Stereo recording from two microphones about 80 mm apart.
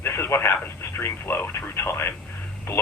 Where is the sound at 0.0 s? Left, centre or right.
Left.